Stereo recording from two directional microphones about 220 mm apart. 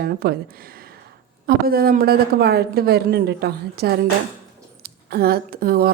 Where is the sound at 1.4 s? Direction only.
45° right (ahead or behind).